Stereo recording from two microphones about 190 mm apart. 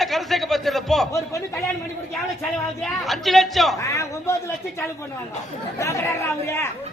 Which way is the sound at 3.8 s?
15° left (ahead or behind).